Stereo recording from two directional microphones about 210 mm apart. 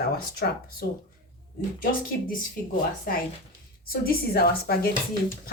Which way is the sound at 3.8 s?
45° left (ahead or behind).